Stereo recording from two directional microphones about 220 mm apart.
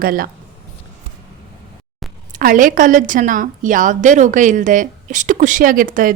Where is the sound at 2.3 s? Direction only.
40° right (ahead or behind).